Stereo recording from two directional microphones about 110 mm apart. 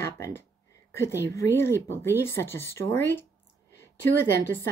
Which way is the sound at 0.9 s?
25° left (ahead or behind).